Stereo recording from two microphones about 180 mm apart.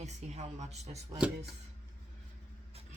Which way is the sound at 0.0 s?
40° right (ahead or behind).